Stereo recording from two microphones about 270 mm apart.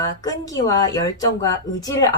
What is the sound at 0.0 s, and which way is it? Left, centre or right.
Speech, centre.